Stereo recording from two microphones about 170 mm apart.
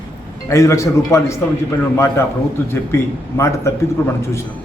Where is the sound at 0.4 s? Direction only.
20° left (ahead or behind).